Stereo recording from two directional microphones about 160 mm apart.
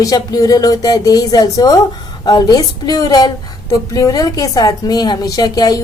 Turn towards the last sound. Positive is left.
turn(degrees=25)  # may be behind; listen again after turning